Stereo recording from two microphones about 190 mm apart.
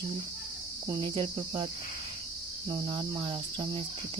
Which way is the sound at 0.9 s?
20° right (ahead or behind).